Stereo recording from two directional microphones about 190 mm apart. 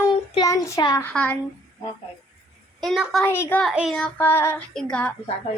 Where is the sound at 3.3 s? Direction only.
10° left (ahead or behind).